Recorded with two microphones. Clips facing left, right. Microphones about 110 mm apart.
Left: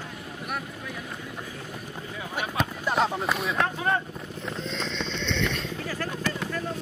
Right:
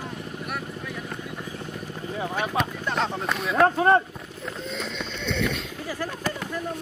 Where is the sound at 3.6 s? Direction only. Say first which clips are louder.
Right 11 dB; 45° right (ahead or behind).